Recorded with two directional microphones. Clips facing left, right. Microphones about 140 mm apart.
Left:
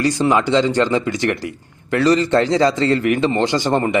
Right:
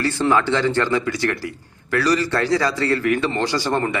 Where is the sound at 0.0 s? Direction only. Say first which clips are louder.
Left 2 dB; 15° left (ahead or behind).